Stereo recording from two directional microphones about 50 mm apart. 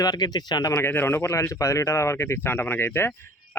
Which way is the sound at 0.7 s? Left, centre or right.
Left.